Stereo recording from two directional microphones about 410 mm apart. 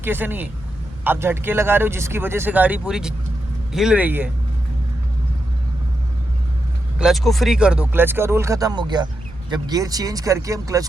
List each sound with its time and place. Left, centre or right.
0.0 s speech: centre
7.0 s speech: centre